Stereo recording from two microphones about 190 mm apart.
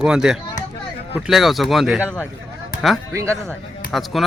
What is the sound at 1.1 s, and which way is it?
A man's voice, centre (ahead or behind).